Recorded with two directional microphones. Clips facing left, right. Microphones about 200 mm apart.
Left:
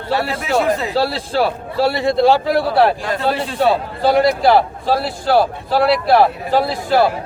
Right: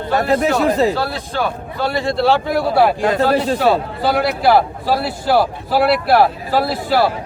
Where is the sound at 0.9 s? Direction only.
30° left (ahead or behind).